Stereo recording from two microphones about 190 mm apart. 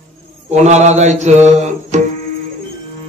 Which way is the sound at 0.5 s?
35° right (ahead or behind).